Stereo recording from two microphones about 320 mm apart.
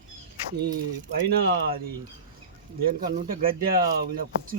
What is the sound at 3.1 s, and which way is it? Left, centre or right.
Speech, right.